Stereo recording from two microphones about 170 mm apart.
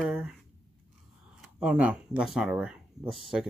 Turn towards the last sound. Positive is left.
turn(degrees=-5)  # may be behind; listen again after turning